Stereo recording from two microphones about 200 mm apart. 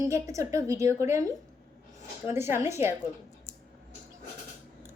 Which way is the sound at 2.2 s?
10° right (ahead or behind).